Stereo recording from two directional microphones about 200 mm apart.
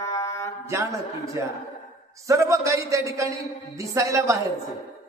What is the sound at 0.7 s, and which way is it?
A woman's voice, 15° right (ahead or behind).